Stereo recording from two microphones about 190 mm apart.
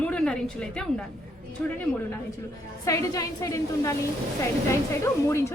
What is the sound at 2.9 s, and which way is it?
A woman's voice, 15° left (ahead or behind).